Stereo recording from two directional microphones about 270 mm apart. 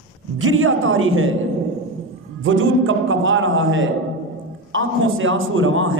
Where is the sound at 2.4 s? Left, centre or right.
Right.